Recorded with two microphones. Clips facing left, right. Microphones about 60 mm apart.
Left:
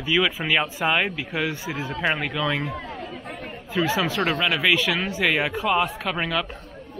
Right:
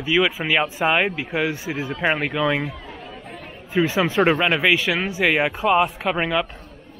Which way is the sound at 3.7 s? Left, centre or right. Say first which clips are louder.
Right 4 dB; right.